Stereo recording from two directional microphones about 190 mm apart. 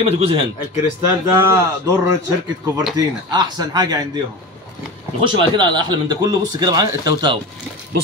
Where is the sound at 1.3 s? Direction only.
15° right (ahead or behind).